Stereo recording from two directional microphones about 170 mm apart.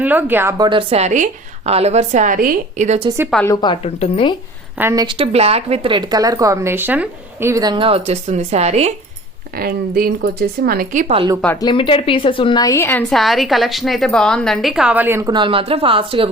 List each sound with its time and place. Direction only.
0.0 s speech: 10° right (ahead or behind)
0.6 s a woman's voice: 30° right (ahead or behind)
3.4 s a woman's voice: 25° left (ahead or behind)
3.8 s speech: 40° left (ahead or behind)
4.8 s speech: 15° right (ahead or behind)
5.0 s a woman's voice: 35° right (ahead or behind)
9.6 s speech: 60° right (ahead or behind)
11.6 s a woman's voice: 30° left (ahead or behind); by 15.3 s 15° right (ahead or behind)
15.3 s a woman's voice: 30° right (ahead or behind)